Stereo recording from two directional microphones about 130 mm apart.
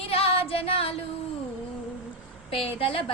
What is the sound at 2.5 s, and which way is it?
Speech, 45° left (ahead or behind).